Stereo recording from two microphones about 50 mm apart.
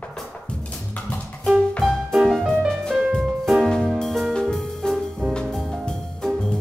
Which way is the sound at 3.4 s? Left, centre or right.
Centre.